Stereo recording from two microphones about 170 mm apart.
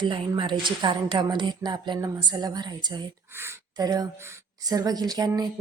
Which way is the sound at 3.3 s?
15° right (ahead or behind).